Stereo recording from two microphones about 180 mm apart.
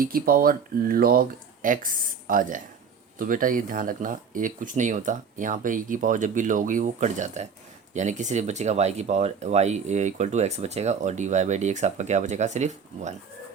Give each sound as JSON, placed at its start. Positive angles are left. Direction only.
{"t": 0.0, "sound": "speech", "side_deg": -55}